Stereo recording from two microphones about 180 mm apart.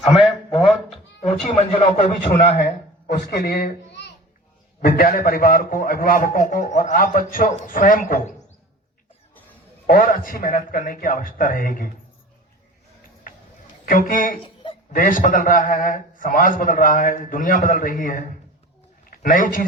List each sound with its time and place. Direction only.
0.3 s a sound: centre (ahead or behind)
0.9 s a man's voice: 40° left (ahead or behind)
3.3 s a child's voice: 55° left (ahead or behind)
9.8 s a man's voice: 50° left (ahead or behind)
13.8 s a man's voice: 50° left (ahead or behind)